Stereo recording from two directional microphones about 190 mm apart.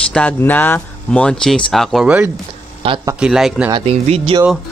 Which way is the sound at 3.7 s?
30° right (ahead or behind).